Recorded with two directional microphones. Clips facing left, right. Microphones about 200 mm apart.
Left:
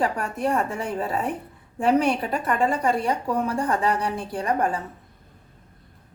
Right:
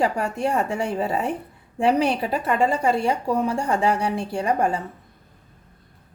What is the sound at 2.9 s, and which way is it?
A woman's voice, 30° right (ahead or behind).